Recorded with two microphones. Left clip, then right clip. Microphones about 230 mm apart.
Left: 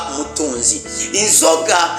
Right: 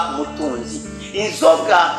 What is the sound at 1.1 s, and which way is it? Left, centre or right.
Speech, left.